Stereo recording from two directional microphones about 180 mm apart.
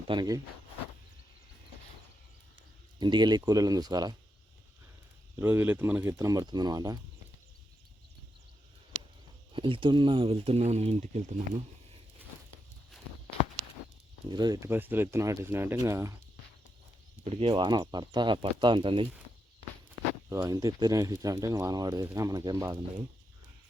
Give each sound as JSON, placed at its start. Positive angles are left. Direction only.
{"t": 0.1, "sound": "speech", "side_deg": -20}
{"t": 3.0, "sound": "speech", "side_deg": -25}
{"t": 5.4, "sound": "speech", "side_deg": -10}
{"t": 9.5, "sound": "speech", "side_deg": -30}
{"t": 14.3, "sound": "speech", "side_deg": -20}
{"t": 17.2, "sound": "speech", "side_deg": -30}
{"t": 20.3, "sound": "speech", "side_deg": -20}